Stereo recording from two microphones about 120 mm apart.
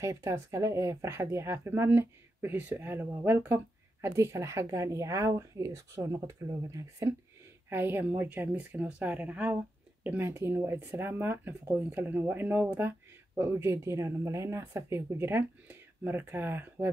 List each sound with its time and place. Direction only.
0.0 s speech: 25° right (ahead or behind)
13.3 s speech: 25° right (ahead or behind)